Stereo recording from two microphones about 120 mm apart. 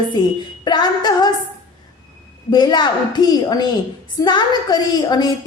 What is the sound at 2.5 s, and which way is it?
A woman's voice, 40° left (ahead or behind).